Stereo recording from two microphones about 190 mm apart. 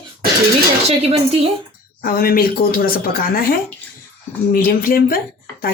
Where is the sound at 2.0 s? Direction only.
50° left (ahead or behind).